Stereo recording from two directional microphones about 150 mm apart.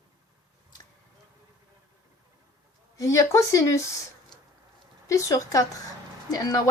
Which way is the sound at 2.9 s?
20° left (ahead or behind).